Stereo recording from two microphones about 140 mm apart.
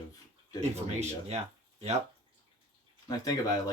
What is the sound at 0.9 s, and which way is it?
Speech, 50° right (ahead or behind).